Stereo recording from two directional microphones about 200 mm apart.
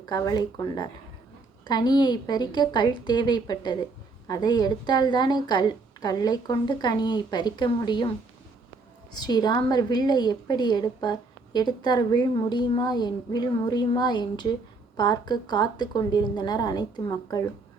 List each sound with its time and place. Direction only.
0.0 s a woman's voice: 20° left (ahead or behind)
9.1 s a woman's voice: 20° left (ahead or behind)